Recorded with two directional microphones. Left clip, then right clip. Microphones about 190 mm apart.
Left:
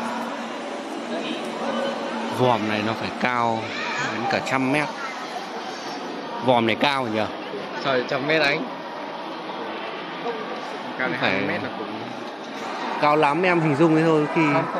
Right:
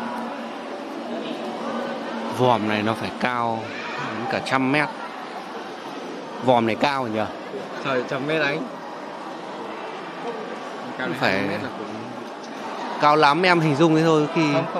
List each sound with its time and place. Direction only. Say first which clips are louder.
1.1 s a sound: left 2 dB; centre (ahead or behind)
2.4 s speech: right 2 dB; 15° right (ahead or behind)
3.2 s speech: left 4 dB; centre (ahead or behind)
6.4 s a man's voice: even; 10° right (ahead or behind)
7.8 s speech: left 2 dB; 40° right (ahead or behind)
11.1 s speech: right 2 dB; 25° right (ahead or behind)
13.0 s speech: right 3 dB; 15° right (ahead or behind)